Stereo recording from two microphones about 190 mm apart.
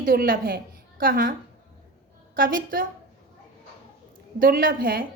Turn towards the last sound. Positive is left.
turn(degrees=-50)  # may be behind; listen again after turning